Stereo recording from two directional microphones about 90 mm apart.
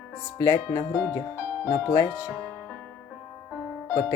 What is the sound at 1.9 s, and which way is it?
Speech, 40° left (ahead or behind).